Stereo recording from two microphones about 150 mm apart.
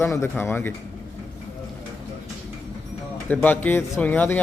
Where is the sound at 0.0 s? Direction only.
15° left (ahead or behind).